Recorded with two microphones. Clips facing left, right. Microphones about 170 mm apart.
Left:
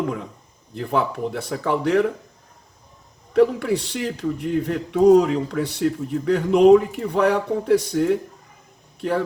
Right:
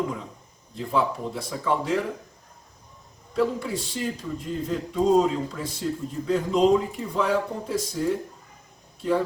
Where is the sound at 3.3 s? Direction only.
70° left (ahead or behind).